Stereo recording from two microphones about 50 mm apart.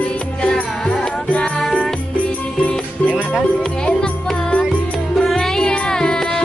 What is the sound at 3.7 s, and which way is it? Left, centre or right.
Music, centre.